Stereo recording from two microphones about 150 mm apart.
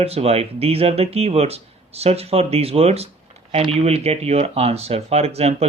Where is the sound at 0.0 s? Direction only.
40° right (ahead or behind).